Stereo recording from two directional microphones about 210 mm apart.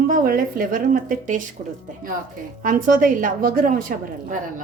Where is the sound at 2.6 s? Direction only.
40° right (ahead or behind).